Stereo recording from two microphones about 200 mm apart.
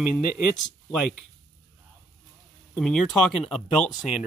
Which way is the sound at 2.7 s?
5° left (ahead or behind).